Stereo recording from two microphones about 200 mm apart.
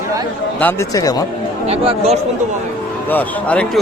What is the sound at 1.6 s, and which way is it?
Speech, 30° right (ahead or behind).